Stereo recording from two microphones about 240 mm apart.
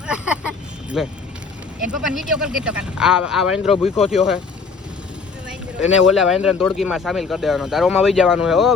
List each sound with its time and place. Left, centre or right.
0.1 s vehicle: centre
1.8 s speech: centre
3.8 s speech: left
4.1 s speech: centre
6.1 s speech: centre